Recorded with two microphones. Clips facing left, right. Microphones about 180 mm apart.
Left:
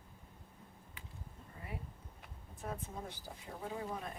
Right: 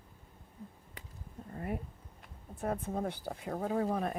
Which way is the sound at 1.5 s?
50° right (ahead or behind).